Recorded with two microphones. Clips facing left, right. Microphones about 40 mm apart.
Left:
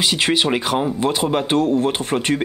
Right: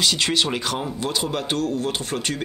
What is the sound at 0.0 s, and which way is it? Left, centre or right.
Speech, left.